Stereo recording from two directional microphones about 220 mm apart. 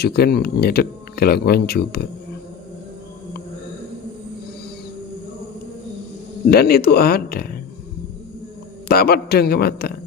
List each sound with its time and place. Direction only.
0.0 s speech: 45° left (ahead or behind)
6.5 s speech: 45° left (ahead or behind)
8.9 s speech: 45° left (ahead or behind)